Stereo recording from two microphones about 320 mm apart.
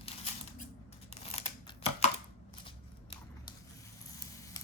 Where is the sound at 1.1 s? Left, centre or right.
Centre.